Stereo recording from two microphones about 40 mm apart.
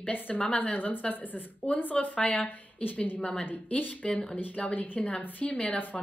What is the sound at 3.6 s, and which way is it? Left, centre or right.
A woman's voice, left.